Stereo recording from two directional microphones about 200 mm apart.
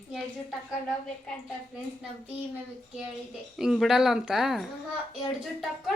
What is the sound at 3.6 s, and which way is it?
A woman's voice, centre (ahead or behind).